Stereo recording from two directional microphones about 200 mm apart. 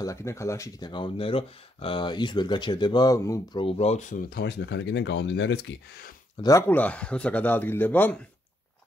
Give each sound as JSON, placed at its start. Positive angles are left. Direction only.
{"t": 0.0, "sound": "speech", "side_deg": 15}
{"t": 3.6, "sound": "speech", "side_deg": 30}
{"t": 4.3, "sound": "speech", "side_deg": 55}
{"t": 6.4, "sound": "speech", "side_deg": 10}